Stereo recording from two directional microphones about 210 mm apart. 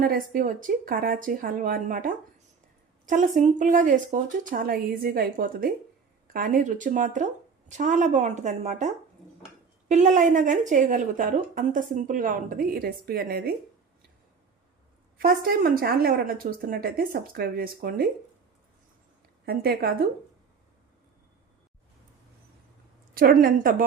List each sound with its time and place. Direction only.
0.0 s a woman's voice: 40° right (ahead or behind)
9.9 s a woman's voice: 35° right (ahead or behind)
15.2 s a woman's voice: 45° right (ahead or behind)
19.5 s a woman's voice: 45° right (ahead or behind)
23.1 s a woman's voice: 40° right (ahead or behind)